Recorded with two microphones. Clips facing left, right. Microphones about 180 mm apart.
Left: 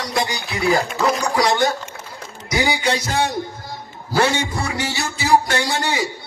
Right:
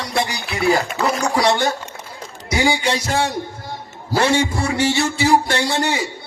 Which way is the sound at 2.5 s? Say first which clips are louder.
Right 2 dB; 30° right (ahead or behind).